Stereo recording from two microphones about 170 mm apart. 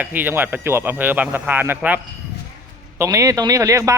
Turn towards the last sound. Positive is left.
turn(degrees=-20)  # may be behind; listen again after turning